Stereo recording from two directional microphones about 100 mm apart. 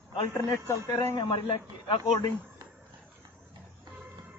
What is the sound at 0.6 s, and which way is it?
Speech, 30° left (ahead or behind).